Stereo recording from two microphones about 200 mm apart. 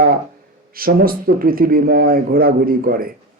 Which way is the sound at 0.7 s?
45° right (ahead or behind).